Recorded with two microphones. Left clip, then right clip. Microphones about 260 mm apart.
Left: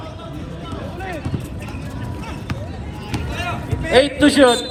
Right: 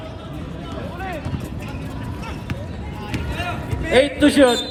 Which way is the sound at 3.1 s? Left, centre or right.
Centre.